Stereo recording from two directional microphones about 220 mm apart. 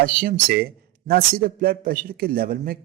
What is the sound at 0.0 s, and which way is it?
A man's voice, 40° right (ahead or behind).